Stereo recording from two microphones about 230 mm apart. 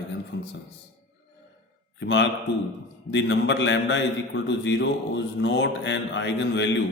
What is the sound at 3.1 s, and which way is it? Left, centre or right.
A man's voice, left.